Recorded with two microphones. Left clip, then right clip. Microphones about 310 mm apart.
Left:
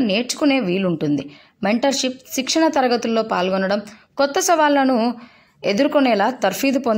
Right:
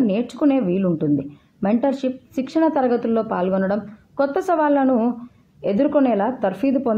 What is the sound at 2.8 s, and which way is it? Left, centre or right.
Speech, right.